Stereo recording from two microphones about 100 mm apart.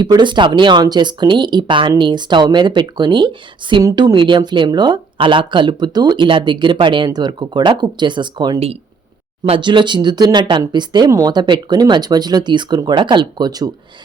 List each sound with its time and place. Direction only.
0.2 s speech: 50° right (ahead or behind)
8.5 s speech: 90° right
9.6 s speech: 50° right (ahead or behind)